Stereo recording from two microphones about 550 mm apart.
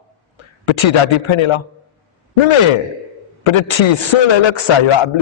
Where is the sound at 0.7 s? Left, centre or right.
Left.